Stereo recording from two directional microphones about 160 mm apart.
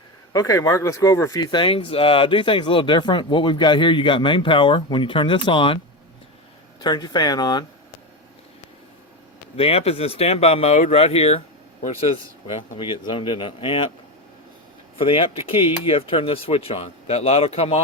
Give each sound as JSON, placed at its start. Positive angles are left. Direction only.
{"t": 0.3, "sound": "speech", "side_deg": 20}
{"t": 6.8, "sound": "speech", "side_deg": 25}
{"t": 9.6, "sound": "speech", "side_deg": 40}
{"t": 12.7, "sound": "speech", "side_deg": 30}
{"t": 14.9, "sound": "speech", "side_deg": 35}